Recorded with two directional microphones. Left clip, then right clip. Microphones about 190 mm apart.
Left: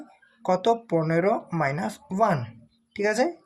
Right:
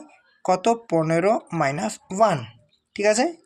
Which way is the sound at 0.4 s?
30° right (ahead or behind).